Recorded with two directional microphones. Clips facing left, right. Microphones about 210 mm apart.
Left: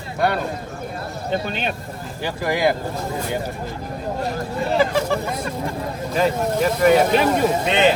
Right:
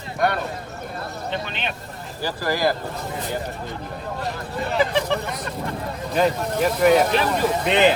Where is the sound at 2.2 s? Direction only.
20° left (ahead or behind).